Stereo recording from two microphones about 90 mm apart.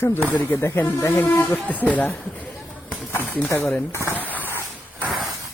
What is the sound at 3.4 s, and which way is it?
Speech, 25° left (ahead or behind).